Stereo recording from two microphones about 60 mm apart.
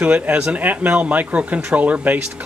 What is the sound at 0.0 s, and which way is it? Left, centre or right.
Speech, right.